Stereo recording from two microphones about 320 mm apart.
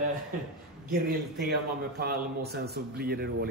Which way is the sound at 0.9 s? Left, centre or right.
Right.